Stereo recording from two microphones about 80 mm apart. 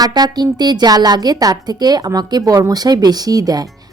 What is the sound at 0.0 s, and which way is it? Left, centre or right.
A woman's voice, right.